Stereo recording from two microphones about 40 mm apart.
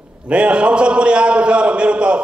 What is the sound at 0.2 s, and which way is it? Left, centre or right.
A man's voice, right.